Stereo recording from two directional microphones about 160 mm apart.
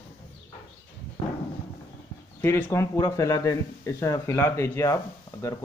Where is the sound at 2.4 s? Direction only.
15° left (ahead or behind).